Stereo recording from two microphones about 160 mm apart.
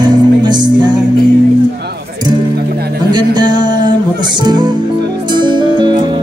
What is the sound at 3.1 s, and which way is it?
Music, 25° right (ahead or behind).